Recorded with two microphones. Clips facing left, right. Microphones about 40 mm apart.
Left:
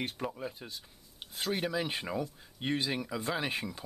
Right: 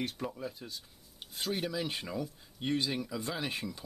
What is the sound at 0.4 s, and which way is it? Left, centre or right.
Speech, left.